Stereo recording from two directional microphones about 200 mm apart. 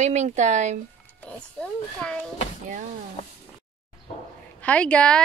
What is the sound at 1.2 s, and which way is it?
Speech, 5° left (ahead or behind).